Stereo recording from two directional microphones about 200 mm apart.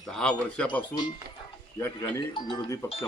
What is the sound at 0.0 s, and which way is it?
Speech, 5° left (ahead or behind).